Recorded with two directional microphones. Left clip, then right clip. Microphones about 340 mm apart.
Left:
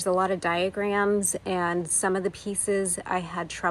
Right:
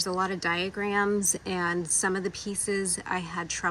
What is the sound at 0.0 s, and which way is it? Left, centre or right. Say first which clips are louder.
Speech: left 4 dB; centre.